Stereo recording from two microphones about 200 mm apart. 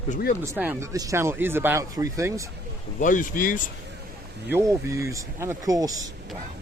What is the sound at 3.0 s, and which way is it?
Speech, 40° left (ahead or behind).